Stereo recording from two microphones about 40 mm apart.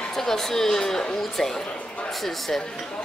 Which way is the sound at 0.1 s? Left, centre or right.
Centre.